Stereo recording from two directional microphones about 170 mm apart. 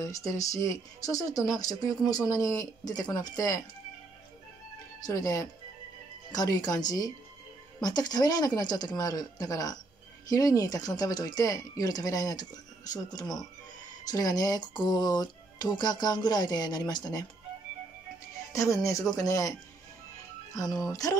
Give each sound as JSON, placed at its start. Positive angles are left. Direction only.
{"t": 0.0, "sound": "speech", "side_deg": 20}
{"t": 5.0, "sound": "speech", "side_deg": 20}
{"t": 18.5, "sound": "speech", "side_deg": 20}
{"t": 20.5, "sound": "speech", "side_deg": 20}